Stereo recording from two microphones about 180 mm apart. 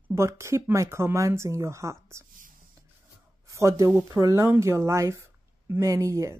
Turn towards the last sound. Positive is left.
turn(degrees=-15)  # may be behind; listen again after turning